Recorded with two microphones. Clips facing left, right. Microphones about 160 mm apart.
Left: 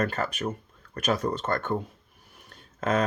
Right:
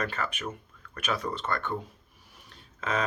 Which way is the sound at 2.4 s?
50° left (ahead or behind).